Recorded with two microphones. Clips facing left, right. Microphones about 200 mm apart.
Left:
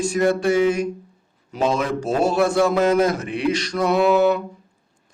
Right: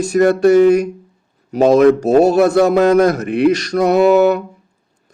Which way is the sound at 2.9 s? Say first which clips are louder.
Right 6 dB; 65° right (ahead or behind).